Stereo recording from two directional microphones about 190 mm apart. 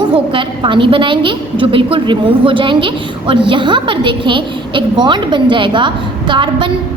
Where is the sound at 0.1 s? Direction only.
25° right (ahead or behind).